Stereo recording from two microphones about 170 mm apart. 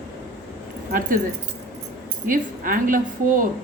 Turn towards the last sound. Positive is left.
turn(degrees=-55)  # may be behind; listen again after turning